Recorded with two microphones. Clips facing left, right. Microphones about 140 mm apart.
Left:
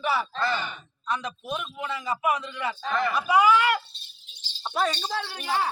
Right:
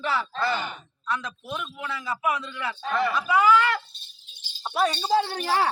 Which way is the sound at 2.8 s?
5° right (ahead or behind).